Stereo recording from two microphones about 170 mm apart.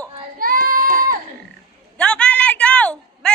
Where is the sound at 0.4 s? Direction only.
55° right (ahead or behind).